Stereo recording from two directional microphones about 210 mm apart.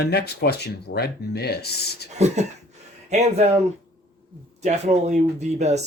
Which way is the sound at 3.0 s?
30° right (ahead or behind).